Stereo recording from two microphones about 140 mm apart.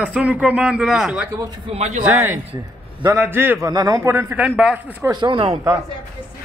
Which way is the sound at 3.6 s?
25° right (ahead or behind).